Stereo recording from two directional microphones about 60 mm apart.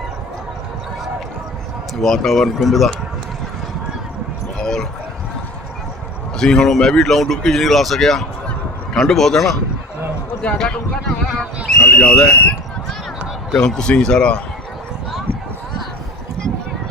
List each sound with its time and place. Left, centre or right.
2.0 s speech: centre
4.5 s a sound: centre
6.3 s speech: centre
11.9 s speech: centre
13.6 s speech: centre